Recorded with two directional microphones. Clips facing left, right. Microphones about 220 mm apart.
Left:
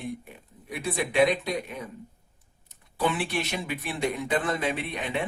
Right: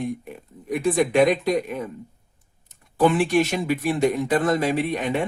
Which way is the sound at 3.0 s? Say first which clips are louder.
Right 9 dB; 45° right (ahead or behind).